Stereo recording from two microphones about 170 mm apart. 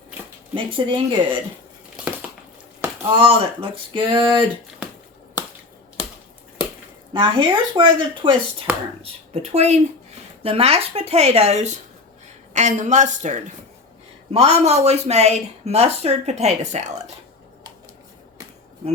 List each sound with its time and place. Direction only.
0.5 s a woman's voice: 30° right (ahead or behind)
3.2 s a woman's voice: 35° right (ahead or behind)
7.1 s a woman's voice: 30° right (ahead or behind)